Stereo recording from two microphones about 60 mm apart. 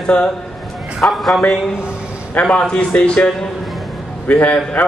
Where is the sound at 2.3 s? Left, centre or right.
Left.